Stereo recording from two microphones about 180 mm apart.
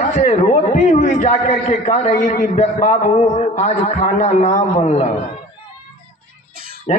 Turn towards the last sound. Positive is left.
turn(degrees=-50)  # may be behind; listen again after turning